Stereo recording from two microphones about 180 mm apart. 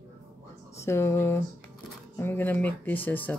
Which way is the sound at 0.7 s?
15° left (ahead or behind).